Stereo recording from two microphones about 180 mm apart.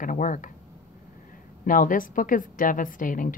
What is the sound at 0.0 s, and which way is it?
Speech, 45° left (ahead or behind).